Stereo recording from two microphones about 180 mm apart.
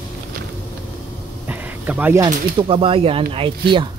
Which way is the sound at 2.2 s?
30° right (ahead or behind).